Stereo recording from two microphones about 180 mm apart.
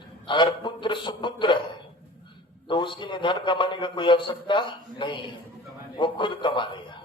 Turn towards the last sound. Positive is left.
turn(degrees=25)  # may be behind; listen again after turning